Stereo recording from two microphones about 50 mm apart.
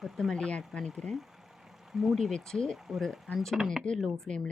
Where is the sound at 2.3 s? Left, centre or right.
Centre.